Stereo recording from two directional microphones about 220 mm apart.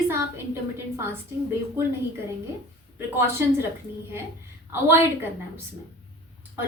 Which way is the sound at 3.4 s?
10° right (ahead or behind).